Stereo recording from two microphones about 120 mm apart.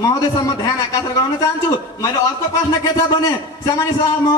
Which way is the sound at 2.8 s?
30° left (ahead or behind).